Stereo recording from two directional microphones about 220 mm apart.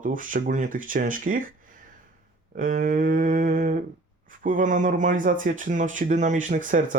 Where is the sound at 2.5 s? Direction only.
40° right (ahead or behind).